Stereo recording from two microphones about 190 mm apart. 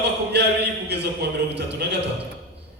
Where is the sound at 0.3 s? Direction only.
60° right (ahead or behind).